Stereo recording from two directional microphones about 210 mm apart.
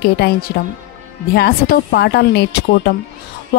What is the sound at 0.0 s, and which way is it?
Speech, 50° left (ahead or behind).